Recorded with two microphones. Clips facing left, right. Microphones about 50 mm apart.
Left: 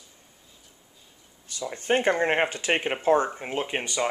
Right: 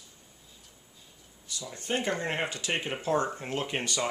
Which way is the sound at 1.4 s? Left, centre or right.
Left.